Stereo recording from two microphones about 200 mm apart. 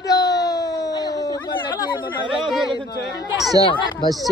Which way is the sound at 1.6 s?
20° left (ahead or behind).